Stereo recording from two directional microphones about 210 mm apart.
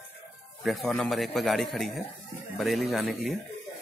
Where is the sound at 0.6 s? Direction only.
Centre (ahead or behind).